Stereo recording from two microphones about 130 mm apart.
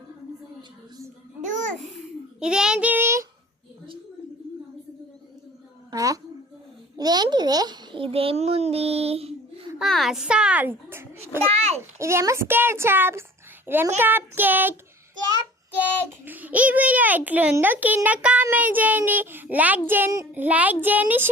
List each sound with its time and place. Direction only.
1.5 s babbling: 75° right (ahead or behind)
2.4 s child singing: 5° right (ahead or behind)
5.9 s a woman's voice: 25° right (ahead or behind)
6.9 s a sound: 30° right (ahead or behind); by 9.3 s 50° right (ahead or behind)
9.7 s a sound: centre (ahead or behind); by 11.1 s 15° right (ahead or behind)
11.5 s a child's voice: 55° right (ahead or behind)
11.9 s a child's voice: 20° right (ahead or behind)
16.2 s a child's voice: 15° right (ahead or behind)